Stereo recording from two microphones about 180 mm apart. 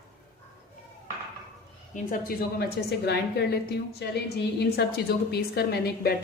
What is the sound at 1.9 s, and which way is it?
A woman's voice, 50° left (ahead or behind).